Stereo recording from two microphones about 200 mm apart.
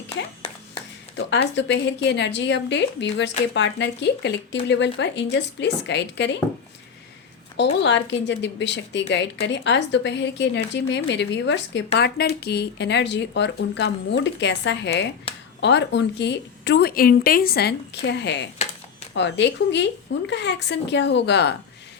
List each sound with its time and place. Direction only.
1.1 s speech: 60° left (ahead or behind)
7.5 s speech: 60° left (ahead or behind)